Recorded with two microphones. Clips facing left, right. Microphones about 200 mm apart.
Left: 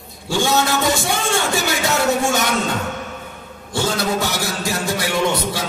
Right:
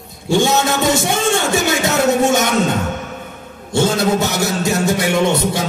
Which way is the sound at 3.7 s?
25° right (ahead or behind).